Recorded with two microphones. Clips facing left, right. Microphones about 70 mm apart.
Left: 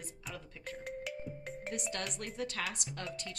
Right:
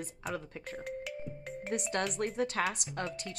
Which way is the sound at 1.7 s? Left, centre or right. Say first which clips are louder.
Right 8 dB; right.